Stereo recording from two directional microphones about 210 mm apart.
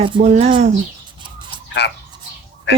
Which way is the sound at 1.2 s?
20° right (ahead or behind).